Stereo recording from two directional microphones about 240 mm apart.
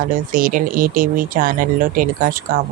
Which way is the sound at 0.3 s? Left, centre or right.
Right.